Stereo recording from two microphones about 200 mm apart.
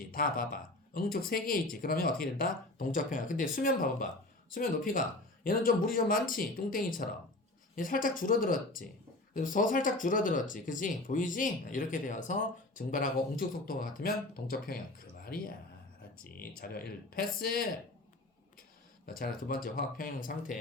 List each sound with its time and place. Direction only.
0.1 s speech: 45° left (ahead or behind)
19.2 s speech: 45° left (ahead or behind)